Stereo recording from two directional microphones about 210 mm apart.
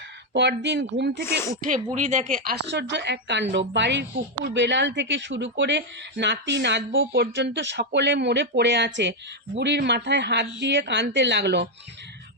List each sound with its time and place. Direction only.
0.3 s a woman's voice: 55° right (ahead or behind)
1.6 s a woman's voice: 35° right (ahead or behind); by 11.7 s 55° right (ahead or behind)